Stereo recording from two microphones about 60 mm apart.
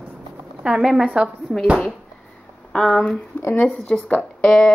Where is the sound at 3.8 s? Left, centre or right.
Left.